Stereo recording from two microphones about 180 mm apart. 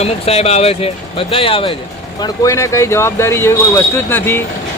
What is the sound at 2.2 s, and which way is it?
Speech, 15° left (ahead or behind).